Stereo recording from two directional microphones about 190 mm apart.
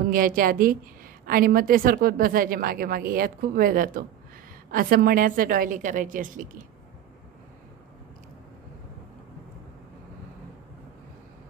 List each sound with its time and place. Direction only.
0.1 s a woman's voice: 50° right (ahead or behind)